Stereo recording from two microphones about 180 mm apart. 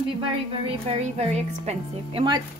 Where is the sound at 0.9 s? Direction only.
35° right (ahead or behind).